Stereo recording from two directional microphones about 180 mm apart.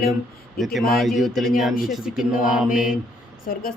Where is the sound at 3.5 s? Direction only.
55° left (ahead or behind).